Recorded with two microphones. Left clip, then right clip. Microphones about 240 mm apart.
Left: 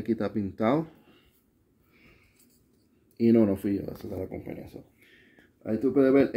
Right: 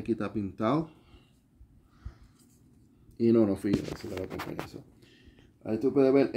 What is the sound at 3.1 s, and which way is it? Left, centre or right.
Speech, centre.